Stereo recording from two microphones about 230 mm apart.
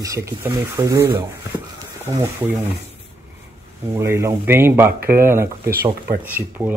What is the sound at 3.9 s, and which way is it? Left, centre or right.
Speech, centre.